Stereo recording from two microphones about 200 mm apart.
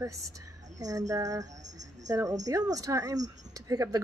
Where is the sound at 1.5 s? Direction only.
35° right (ahead or behind).